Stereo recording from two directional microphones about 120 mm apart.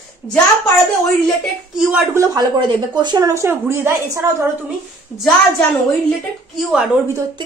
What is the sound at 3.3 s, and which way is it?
Speech, 20° right (ahead or behind).